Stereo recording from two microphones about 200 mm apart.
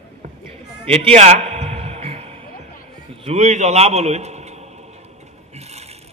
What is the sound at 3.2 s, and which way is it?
A man's voice, 35° right (ahead or behind).